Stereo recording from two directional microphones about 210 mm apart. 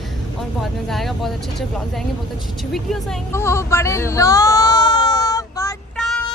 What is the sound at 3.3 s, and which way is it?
Baby cry, 10° left (ahead or behind).